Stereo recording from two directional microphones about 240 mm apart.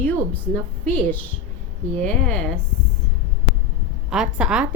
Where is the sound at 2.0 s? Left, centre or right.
Centre.